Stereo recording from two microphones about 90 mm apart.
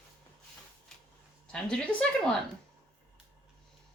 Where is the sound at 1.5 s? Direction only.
10° left (ahead or behind).